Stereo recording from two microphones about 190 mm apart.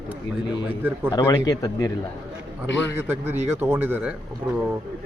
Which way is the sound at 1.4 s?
20° left (ahead or behind).